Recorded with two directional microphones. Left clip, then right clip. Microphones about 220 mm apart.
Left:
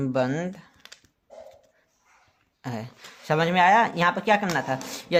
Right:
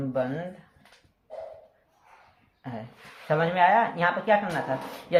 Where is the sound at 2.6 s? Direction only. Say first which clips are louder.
Left 4 dB; 45° left (ahead or behind).